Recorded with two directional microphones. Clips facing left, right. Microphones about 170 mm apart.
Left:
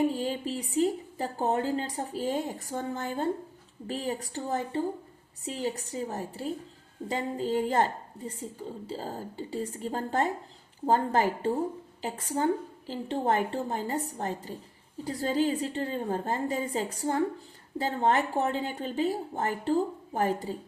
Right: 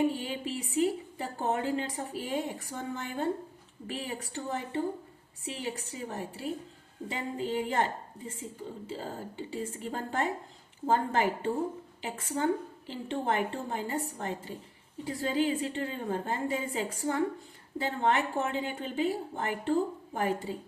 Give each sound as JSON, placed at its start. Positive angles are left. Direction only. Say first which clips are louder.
{"t": 0.2, "sound": "a woman's voice", "louder": "left 4 dB", "side_deg": 35}
{"t": 8.9, "sound": "a woman's voice", "louder": "left 2 dB", "side_deg": 40}